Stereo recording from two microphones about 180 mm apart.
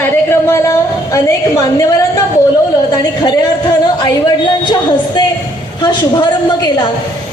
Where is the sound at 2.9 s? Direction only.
20° left (ahead or behind).